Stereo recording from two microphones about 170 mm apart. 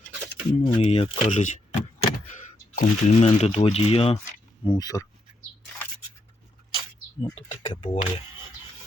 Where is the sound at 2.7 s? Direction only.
45° left (ahead or behind).